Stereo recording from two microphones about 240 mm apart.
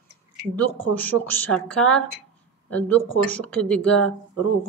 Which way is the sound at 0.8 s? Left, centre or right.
Centre.